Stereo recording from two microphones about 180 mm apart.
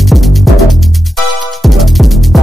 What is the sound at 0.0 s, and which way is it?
Music, centre (ahead or behind).